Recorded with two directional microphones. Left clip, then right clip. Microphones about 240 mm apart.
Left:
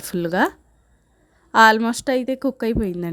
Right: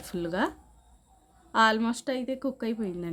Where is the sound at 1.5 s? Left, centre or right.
Left.